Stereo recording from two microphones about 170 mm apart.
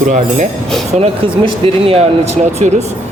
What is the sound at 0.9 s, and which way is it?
A man's voice, 35° right (ahead or behind).